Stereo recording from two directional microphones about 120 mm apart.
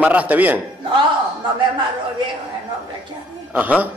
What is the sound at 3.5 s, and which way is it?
Speech, 15° right (ahead or behind).